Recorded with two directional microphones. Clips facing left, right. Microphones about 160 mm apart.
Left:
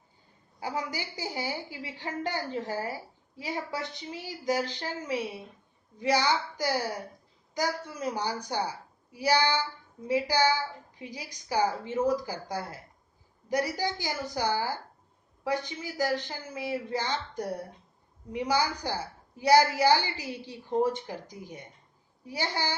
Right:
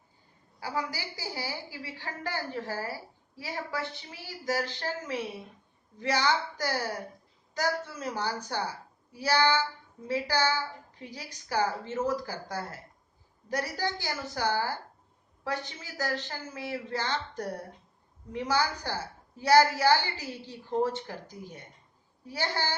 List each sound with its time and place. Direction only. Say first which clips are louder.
0.6 s a woman's voice: left 1 dB; 20° left (ahead or behind)